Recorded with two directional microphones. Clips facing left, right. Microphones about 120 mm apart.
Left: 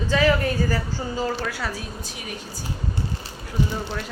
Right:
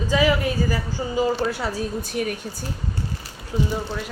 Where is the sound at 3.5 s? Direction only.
20° right (ahead or behind).